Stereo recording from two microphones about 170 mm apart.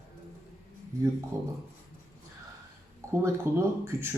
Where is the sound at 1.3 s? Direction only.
15° right (ahead or behind).